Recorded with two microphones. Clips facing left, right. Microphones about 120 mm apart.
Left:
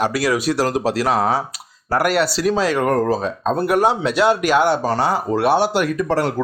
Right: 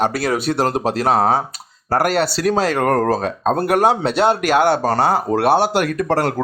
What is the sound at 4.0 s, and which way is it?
Speech, 30° right (ahead or behind).